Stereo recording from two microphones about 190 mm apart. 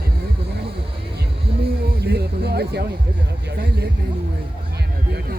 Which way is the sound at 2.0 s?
60° right (ahead or behind).